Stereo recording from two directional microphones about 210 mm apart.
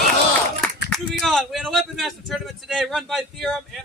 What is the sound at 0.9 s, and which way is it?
Speech, centre (ahead or behind).